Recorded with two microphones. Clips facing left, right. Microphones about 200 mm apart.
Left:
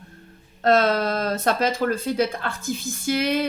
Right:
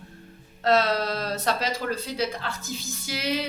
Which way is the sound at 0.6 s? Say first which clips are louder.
Left 3 dB; 50° left (ahead or behind).